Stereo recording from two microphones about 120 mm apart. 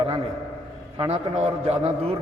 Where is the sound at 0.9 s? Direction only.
45° right (ahead or behind).